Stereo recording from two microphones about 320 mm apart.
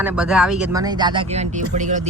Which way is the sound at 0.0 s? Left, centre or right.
Centre.